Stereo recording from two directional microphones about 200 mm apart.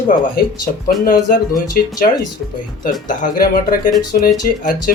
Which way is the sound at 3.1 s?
40° left (ahead or behind).